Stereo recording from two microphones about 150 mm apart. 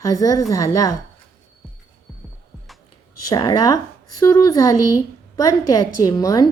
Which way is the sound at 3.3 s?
25° left (ahead or behind).